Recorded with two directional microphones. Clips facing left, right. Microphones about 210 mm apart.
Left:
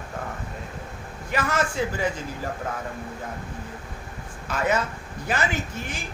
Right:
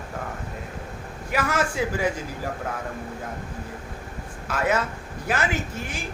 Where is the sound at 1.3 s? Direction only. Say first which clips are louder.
Right 1 dB; 10° right (ahead or behind).